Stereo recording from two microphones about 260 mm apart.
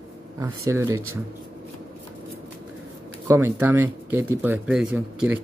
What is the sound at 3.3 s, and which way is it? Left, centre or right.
Speech, centre.